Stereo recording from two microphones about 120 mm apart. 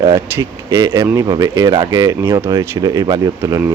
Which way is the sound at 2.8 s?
30° right (ahead or behind).